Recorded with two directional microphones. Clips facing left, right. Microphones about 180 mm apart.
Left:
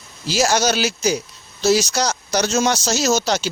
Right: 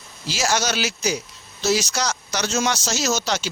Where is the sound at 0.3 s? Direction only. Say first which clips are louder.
Left 5 dB; 40° left (ahead or behind).